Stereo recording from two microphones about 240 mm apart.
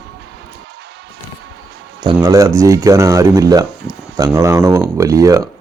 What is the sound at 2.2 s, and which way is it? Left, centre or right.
Speech, centre.